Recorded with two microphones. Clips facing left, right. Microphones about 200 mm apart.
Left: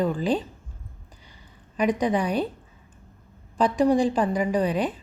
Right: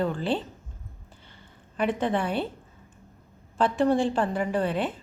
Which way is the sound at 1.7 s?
15° left (ahead or behind).